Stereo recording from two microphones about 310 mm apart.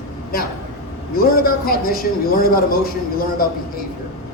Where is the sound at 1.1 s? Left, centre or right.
Left.